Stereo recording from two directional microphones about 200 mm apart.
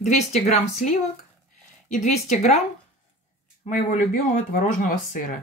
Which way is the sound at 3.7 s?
40° left (ahead or behind).